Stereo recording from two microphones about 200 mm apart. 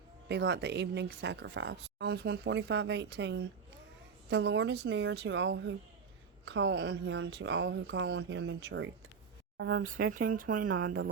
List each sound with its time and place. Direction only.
0.3 s speech: 60° right (ahead or behind)
9.8 s speech: 45° right (ahead or behind)